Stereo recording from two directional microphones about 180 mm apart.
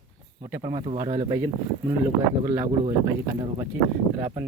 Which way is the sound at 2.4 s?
20° right (ahead or behind).